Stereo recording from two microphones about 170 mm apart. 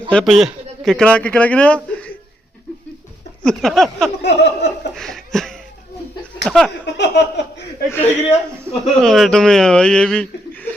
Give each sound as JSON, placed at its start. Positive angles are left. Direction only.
{"t": 0.1, "sound": "a man's voice", "side_deg": 5}
{"t": 3.4, "sound": "speech", "side_deg": 0}
{"t": 4.2, "sound": "a sound", "side_deg": 80}
{"t": 4.9, "sound": "laughter", "side_deg": 0}
{"t": 6.4, "sound": "a sound", "side_deg": 0}
{"t": 6.8, "sound": "speech", "side_deg": 90}
{"t": 7.9, "sound": "a man's voice", "side_deg": 10}